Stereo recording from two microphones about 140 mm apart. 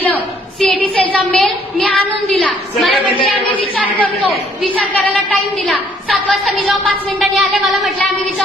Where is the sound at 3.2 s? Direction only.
40° left (ahead or behind).